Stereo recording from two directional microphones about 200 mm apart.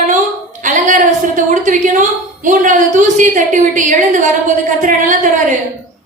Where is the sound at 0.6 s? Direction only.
40° right (ahead or behind).